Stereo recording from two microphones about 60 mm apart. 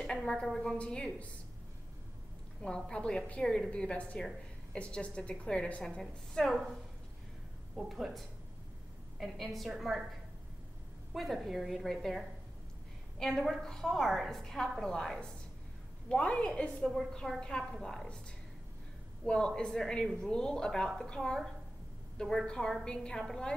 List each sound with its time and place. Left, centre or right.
0.0 s a woman's voice: centre
2.6 s a woman's voice: centre
7.7 s a woman's voice: centre
11.1 s a woman's voice: centre
16.1 s a woman's voice: centre
19.2 s a woman's voice: centre